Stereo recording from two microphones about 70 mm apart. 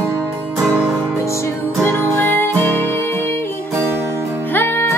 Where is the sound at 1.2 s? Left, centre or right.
Left.